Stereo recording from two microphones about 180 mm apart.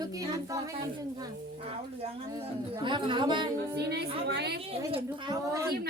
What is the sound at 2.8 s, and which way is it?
Speech, 25° right (ahead or behind).